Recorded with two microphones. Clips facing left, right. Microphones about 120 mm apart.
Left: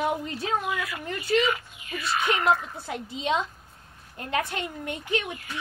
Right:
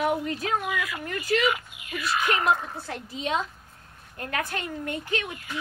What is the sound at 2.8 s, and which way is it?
Speech, 20° left (ahead or behind).